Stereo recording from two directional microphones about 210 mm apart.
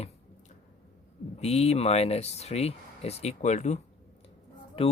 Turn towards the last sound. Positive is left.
turn(degrees=30)  # may be behind; listen again after turning